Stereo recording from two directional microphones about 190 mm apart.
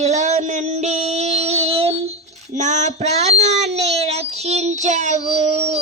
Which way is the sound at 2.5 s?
40° right (ahead or behind).